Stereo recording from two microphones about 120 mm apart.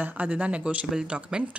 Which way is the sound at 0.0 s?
15° right (ahead or behind).